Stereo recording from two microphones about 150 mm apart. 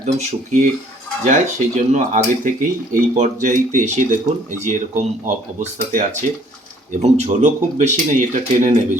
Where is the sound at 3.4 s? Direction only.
60° right (ahead or behind).